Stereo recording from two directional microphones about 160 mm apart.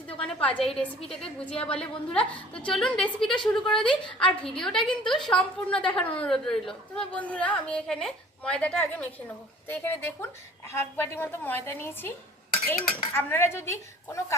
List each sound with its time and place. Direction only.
0.4 s a woman's voice: 5° left (ahead or behind)